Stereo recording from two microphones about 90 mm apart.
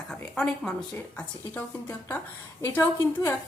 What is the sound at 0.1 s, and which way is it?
Speech, 5° left (ahead or behind).